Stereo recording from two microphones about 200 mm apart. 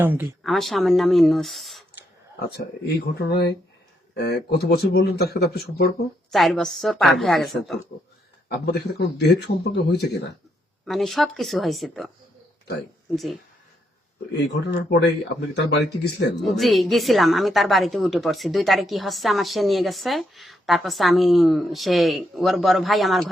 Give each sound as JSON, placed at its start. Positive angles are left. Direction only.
{"t": 0.0, "sound": "a woman's voice", "side_deg": -10}
{"t": 2.3, "sound": "speech", "side_deg": 55}
{"t": 6.3, "sound": "a woman's voice", "side_deg": 0}
{"t": 8.4, "sound": "speech", "side_deg": 55}
{"t": 10.8, "sound": "a woman's voice", "side_deg": 0}
{"t": 13.1, "sound": "a woman's voice", "side_deg": 0}
{"t": 14.4, "sound": "speech", "side_deg": 60}
{"t": 16.4, "sound": "a woman's voice", "side_deg": 0}